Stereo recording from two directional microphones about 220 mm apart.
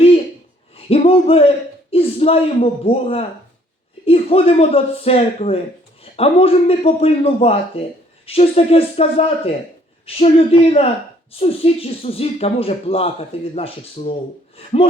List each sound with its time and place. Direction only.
0.8 s a man's voice: 25° left (ahead or behind)